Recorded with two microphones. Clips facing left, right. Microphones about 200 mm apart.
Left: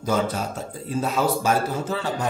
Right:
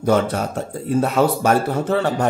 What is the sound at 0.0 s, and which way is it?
Speech, 65° right (ahead or behind).